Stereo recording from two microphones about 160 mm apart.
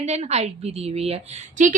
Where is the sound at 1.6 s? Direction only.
50° right (ahead or behind).